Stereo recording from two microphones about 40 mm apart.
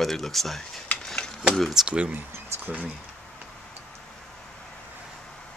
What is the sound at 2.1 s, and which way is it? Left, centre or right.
Speech, right.